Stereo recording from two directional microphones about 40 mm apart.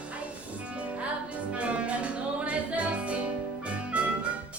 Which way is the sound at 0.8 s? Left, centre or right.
Right.